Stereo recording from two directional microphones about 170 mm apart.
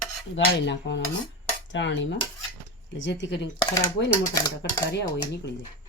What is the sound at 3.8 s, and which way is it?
Speech, 20° left (ahead or behind).